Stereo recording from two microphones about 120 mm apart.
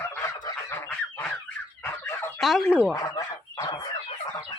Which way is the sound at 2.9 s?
30° left (ahead or behind).